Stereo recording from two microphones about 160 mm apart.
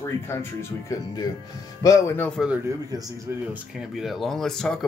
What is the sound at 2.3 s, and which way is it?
Speech, 5° right (ahead or behind).